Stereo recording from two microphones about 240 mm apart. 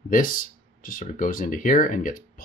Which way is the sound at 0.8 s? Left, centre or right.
Left.